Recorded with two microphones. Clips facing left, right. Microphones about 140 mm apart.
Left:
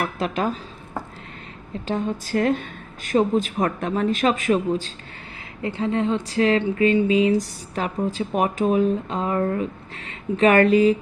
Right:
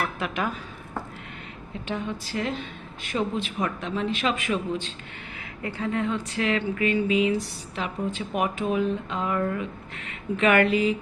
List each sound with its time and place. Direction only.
0.2 s speech: 35° left (ahead or behind)
1.9 s a woman's voice: 40° left (ahead or behind)
5.6 s speech: 25° left (ahead or behind)